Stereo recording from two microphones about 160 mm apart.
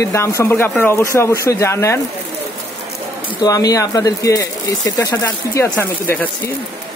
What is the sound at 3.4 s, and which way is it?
Speech, 25° left (ahead or behind).